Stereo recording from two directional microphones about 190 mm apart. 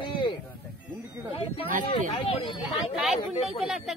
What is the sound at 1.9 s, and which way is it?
Speech, 30° left (ahead or behind).